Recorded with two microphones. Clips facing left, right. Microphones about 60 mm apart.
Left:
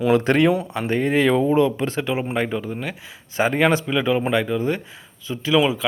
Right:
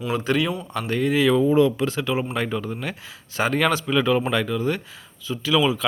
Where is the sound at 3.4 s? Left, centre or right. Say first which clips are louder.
Left 3 dB; left.